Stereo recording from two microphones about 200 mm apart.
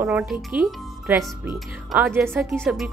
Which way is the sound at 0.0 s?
10° right (ahead or behind).